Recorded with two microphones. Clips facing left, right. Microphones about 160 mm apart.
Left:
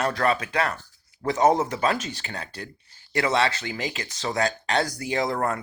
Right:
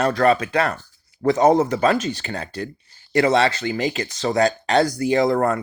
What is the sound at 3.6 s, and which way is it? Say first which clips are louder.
Speech: right 8 dB; 45° right (ahead or behind).